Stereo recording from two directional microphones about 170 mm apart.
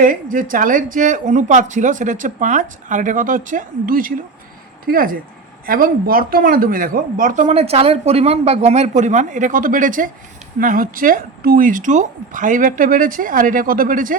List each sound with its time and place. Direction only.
0.0 s speech: 50° right (ahead or behind)